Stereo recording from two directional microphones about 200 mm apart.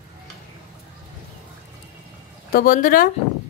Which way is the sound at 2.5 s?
50° left (ahead or behind).